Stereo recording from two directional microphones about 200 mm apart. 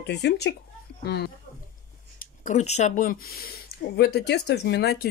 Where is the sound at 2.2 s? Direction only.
35° left (ahead or behind); by 5.0 s 55° left (ahead or behind).